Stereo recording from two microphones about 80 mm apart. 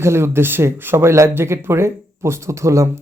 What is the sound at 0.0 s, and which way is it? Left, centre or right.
Speech, right.